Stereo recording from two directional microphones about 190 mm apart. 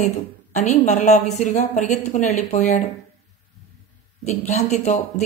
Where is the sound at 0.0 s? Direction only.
35° left (ahead or behind).